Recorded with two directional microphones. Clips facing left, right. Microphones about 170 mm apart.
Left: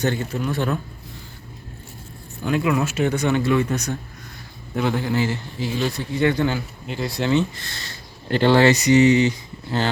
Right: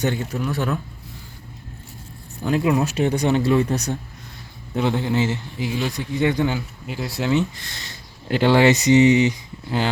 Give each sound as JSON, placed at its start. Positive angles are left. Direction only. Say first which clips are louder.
{"t": 0.0, "sound": "speech", "louder": "even", "side_deg": -15}
{"t": 2.5, "sound": "speech", "louder": "right 1 dB", "side_deg": -35}
{"t": 4.8, "sound": "speech", "louder": "right 1 dB", "side_deg": -20}